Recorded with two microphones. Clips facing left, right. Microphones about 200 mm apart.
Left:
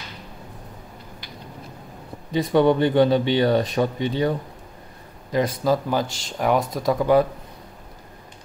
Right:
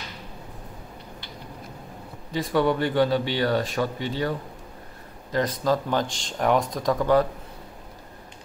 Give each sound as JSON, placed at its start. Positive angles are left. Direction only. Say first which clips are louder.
{"t": 2.3, "sound": "speech", "louder": "left 5 dB", "side_deg": 20}
{"t": 5.3, "sound": "speech", "louder": "left 3 dB", "side_deg": 10}